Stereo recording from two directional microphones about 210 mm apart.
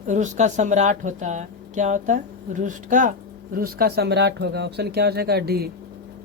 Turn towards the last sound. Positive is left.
turn(degrees=-50)  # may be behind; listen again after turning